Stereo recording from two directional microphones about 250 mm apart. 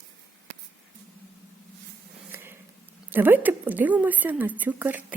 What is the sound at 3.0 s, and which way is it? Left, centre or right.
A woman's voice, centre.